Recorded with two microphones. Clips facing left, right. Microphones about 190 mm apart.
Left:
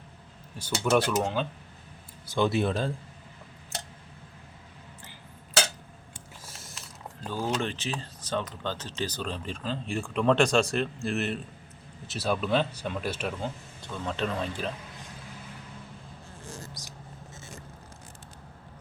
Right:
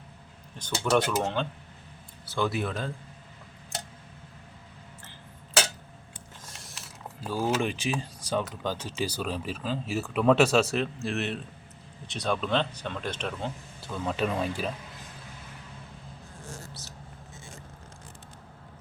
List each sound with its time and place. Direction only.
0.6 s speech: 5° left (ahead or behind)
2.5 s speech: 30° left (ahead or behind)
6.4 s speech: centre (ahead or behind)
13.8 s speech: 5° right (ahead or behind)
16.5 s a sound: 15° left (ahead or behind)